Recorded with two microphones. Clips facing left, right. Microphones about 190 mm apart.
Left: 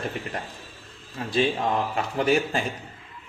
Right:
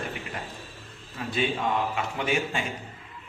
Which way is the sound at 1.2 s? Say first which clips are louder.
Left 4 dB; 30° left (ahead or behind).